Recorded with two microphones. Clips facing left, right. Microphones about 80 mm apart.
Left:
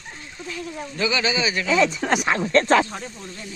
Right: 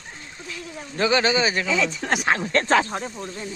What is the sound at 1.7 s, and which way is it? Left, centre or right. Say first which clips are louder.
Speech: left 4 dB; left.